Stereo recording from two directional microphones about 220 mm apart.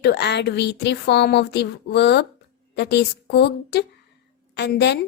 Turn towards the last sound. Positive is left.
turn(degrees=50)  # may be behind; listen again after turning